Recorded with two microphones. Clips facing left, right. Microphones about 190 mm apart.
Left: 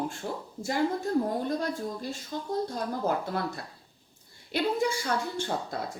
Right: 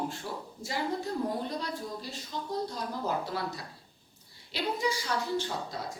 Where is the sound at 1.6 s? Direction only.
50° left (ahead or behind).